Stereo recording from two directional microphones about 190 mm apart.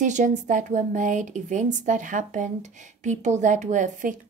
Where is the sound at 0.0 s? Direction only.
40° right (ahead or behind).